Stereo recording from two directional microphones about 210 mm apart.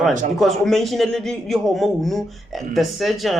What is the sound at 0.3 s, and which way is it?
A man's voice, centre (ahead or behind).